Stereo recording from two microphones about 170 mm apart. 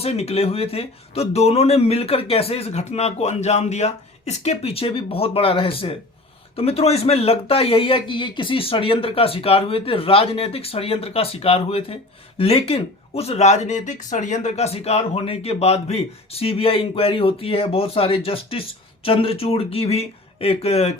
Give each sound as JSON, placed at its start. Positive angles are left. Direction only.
{"t": 0.0, "sound": "speech", "side_deg": 35}